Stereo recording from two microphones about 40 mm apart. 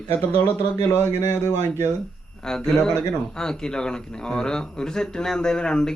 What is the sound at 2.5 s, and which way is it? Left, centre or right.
Speech, centre.